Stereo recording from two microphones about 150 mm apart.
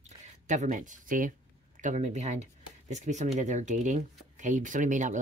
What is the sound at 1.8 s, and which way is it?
Speech, 55° right (ahead or behind).